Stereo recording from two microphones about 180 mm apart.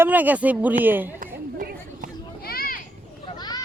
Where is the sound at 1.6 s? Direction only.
55° right (ahead or behind).